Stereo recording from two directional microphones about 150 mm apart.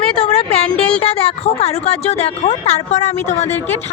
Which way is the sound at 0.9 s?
40° left (ahead or behind).